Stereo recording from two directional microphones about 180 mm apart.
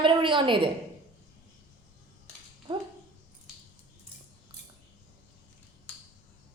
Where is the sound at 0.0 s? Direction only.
25° right (ahead or behind).